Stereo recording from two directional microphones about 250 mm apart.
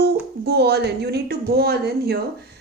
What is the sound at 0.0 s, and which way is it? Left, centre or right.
Speech, right.